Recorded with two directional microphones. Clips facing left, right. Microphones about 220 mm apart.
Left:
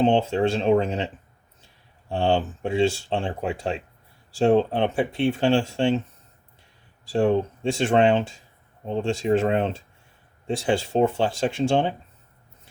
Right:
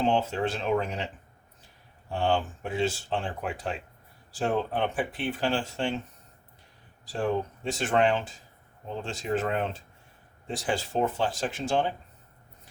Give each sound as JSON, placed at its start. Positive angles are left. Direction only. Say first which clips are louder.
{"t": 0.0, "sound": "speech", "louder": "left 6 dB", "side_deg": 30}
{"t": 2.0, "sound": "speech", "louder": "left 4 dB", "side_deg": 30}
{"t": 7.0, "sound": "speech", "louder": "left 8 dB", "side_deg": 30}
{"t": 10.7, "sound": "speech", "louder": "left 7 dB", "side_deg": 30}